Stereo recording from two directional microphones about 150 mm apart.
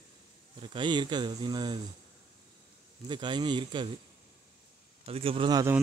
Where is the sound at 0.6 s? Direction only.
30° right (ahead or behind).